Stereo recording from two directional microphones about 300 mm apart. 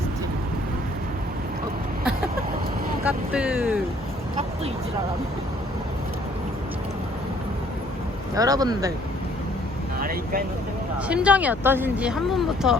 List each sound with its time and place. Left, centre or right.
3.0 s speech: centre
8.4 s speech: centre
10.0 s speech: right
11.1 s speech: centre